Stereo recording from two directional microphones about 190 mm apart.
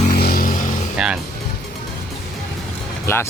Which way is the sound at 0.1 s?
50° left (ahead or behind).